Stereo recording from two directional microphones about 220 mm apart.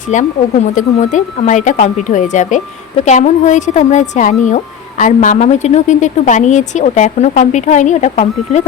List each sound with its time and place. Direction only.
0.1 s a woman's voice: 35° left (ahead or behind)